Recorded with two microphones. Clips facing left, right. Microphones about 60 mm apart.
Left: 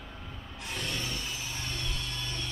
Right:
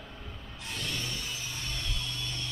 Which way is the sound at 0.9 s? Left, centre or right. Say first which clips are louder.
Left 1 dB; centre.